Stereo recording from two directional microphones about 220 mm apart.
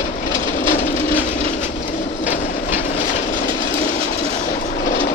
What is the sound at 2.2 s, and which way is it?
Train, 30° left (ahead or behind).